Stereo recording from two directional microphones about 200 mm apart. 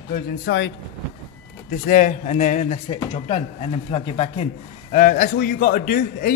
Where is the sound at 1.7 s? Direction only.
45° left (ahead or behind).